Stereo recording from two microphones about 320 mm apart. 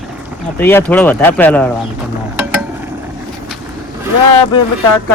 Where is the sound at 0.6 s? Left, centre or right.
Centre.